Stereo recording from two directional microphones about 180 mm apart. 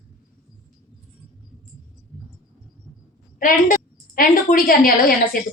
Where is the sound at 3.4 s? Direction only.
50° left (ahead or behind).